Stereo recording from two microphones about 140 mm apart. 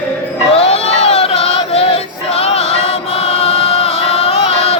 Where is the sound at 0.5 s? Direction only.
45° left (ahead or behind).